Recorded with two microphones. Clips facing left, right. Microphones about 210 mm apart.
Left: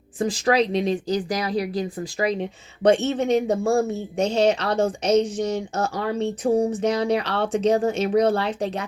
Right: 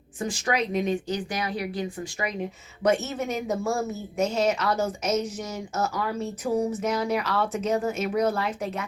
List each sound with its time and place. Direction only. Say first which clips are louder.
0.4 s speech: left 5 dB; 35° left (ahead or behind)